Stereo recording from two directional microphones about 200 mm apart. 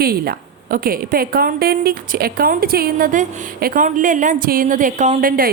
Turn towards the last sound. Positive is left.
turn(degrees=-45)  # may be behind; listen again after turning